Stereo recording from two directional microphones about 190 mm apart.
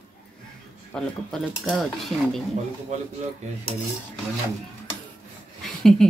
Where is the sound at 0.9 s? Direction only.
Centre (ahead or behind).